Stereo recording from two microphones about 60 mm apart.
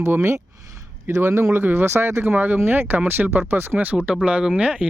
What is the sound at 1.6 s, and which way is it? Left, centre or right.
Speech, right.